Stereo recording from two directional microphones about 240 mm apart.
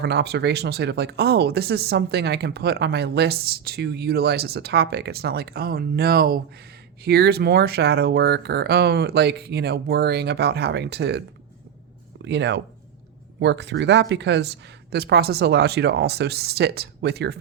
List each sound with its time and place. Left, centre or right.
0.0 s speech: right
12.2 s speech: right